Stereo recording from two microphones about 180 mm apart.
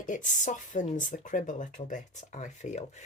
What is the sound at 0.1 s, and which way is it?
Speech, 45° left (ahead or behind).